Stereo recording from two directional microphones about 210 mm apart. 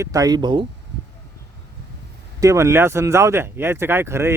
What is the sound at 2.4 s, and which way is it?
Speech, 15° right (ahead or behind).